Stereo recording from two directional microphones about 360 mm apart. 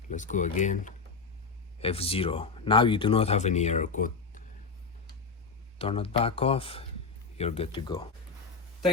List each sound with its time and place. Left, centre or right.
0.1 s speech: left
5.8 s speech: centre